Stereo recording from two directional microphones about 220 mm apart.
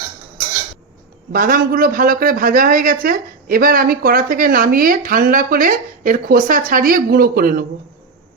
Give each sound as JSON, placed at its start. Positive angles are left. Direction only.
{"t": 1.3, "sound": "speech", "side_deg": -40}